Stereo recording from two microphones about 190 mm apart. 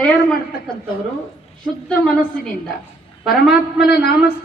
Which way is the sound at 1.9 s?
5° left (ahead or behind).